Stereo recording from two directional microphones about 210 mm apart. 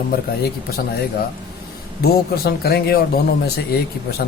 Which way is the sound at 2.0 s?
45° left (ahead or behind).